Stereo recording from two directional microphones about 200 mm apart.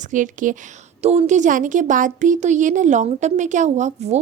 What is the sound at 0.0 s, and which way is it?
Speech, 40° right (ahead or behind).